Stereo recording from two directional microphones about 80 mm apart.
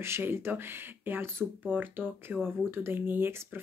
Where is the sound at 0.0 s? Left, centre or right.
Right.